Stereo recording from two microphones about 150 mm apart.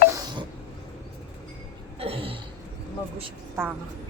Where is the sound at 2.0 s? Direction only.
40° right (ahead or behind).